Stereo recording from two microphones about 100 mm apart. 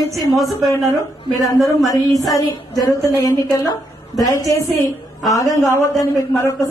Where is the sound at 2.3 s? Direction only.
40° left (ahead or behind).